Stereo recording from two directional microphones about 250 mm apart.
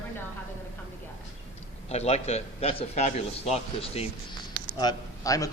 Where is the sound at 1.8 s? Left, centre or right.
Left.